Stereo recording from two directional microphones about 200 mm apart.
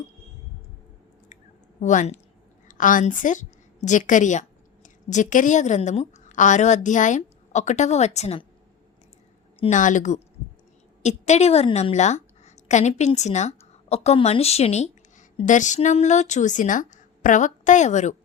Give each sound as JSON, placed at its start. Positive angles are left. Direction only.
{"t": 1.8, "sound": "a woman's voice", "side_deg": 40}
{"t": 9.6, "sound": "a woman's voice", "side_deg": 35}